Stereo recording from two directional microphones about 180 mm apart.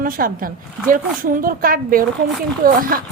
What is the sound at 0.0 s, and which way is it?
A woman's voice, 50° right (ahead or behind).